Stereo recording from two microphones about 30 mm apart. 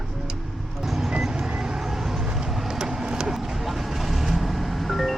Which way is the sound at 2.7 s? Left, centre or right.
Centre.